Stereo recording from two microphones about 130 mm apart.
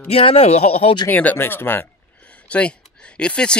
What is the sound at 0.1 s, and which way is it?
Speech, 50° left (ahead or behind).